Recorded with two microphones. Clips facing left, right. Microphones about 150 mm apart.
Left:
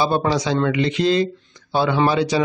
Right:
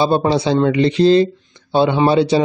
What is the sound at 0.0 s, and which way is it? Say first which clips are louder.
Speech: right 4 dB; 25° right (ahead or behind).